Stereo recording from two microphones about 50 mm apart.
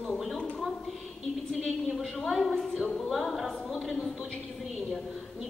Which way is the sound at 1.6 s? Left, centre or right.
Centre.